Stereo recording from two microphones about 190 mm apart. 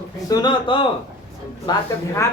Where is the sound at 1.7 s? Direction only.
15° left (ahead or behind).